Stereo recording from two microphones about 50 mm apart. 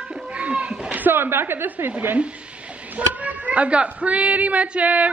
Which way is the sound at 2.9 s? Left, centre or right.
Right.